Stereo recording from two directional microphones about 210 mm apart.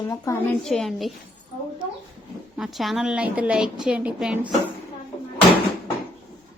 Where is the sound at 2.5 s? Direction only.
Centre (ahead or behind).